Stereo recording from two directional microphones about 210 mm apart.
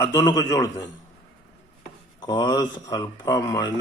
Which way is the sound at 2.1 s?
20° left (ahead or behind).